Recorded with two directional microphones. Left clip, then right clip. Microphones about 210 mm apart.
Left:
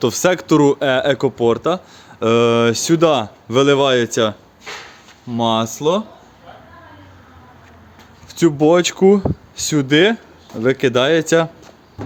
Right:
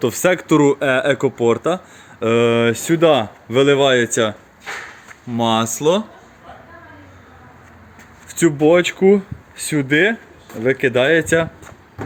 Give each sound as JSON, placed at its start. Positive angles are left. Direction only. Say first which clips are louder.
{"t": 0.0, "sound": "speech", "louder": "left 1 dB", "side_deg": 15}
{"t": 8.3, "sound": "a sound", "louder": "left 1 dB", "side_deg": 10}
{"t": 8.5, "sound": "speech", "louder": "right 1 dB", "side_deg": 25}